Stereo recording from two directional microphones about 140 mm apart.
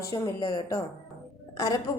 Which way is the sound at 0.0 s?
30° left (ahead or behind).